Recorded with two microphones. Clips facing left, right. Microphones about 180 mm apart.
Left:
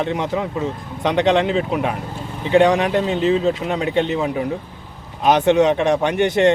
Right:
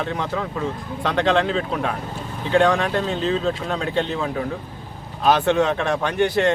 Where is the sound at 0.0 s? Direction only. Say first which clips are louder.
Left 4 dB; 20° left (ahead or behind).